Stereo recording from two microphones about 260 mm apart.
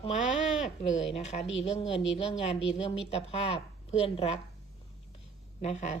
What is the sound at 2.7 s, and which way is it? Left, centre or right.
A woman's voice, left.